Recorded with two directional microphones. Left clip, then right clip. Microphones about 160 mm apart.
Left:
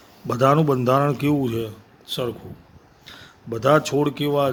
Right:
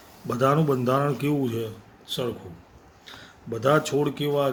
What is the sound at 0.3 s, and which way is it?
A man's voice, 50° left (ahead or behind).